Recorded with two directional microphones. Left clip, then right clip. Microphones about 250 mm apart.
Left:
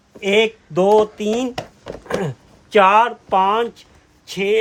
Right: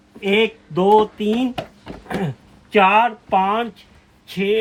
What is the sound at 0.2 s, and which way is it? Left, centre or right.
Speech, left.